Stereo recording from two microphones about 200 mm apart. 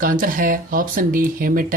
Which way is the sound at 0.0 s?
45° right (ahead or behind).